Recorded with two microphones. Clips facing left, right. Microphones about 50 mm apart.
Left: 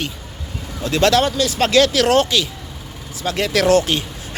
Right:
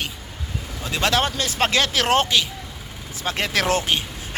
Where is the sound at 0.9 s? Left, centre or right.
Centre.